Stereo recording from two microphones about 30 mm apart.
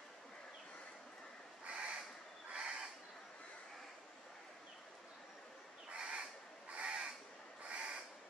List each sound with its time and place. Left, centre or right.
1.7 s crow: right
2.5 s a sound: right
5.9 s crow: right